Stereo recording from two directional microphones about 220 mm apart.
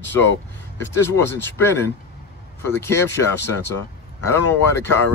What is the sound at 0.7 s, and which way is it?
Speech, 10° left (ahead or behind).